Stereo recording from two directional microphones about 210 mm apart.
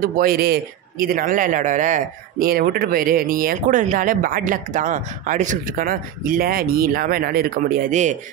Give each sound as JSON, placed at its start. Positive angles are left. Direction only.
{"t": 0.0, "sound": "speech", "side_deg": -45}